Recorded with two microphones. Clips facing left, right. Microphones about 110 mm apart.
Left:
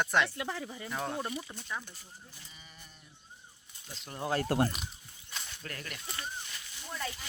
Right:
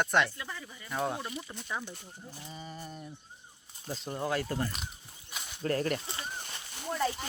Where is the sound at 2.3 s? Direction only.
35° right (ahead or behind).